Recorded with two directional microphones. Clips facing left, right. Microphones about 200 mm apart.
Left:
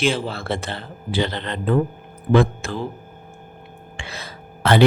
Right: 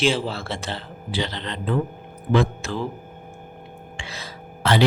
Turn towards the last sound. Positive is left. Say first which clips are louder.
# left 3 dB
turn(degrees=55)  # may be behind; listen again after turning